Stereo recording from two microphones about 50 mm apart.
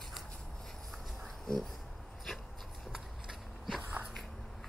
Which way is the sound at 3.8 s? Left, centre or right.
Right.